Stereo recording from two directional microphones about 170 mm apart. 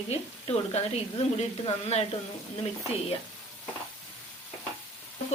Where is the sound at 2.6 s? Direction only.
35° left (ahead or behind).